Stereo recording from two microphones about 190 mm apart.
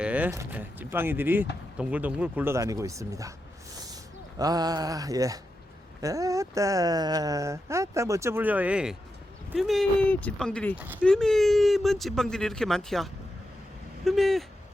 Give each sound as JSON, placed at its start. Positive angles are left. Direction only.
{"t": 0.0, "sound": "speech", "side_deg": -10}
{"t": 4.4, "sound": "mantra", "side_deg": -20}
{"t": 6.0, "sound": "speech", "side_deg": -15}
{"t": 10.8, "sound": "speech", "side_deg": -10}
{"t": 11.0, "sound": "speech", "side_deg": 5}